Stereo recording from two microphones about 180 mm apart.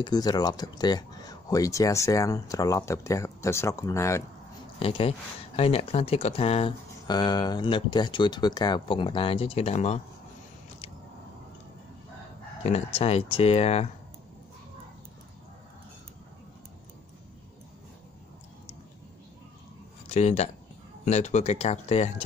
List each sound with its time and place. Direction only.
0.0 s speech: 20° left (ahead or behind)
4.7 s speech: 30° left (ahead or behind)
12.6 s speech: 35° left (ahead or behind)
20.1 s speech: 40° left (ahead or behind)